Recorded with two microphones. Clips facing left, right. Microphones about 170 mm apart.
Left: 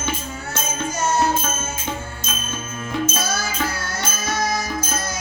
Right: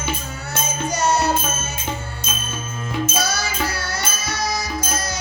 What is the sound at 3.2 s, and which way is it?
Music, 75° right (ahead or behind).